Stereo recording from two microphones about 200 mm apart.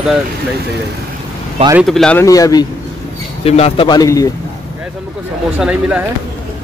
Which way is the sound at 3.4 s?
30° left (ahead or behind).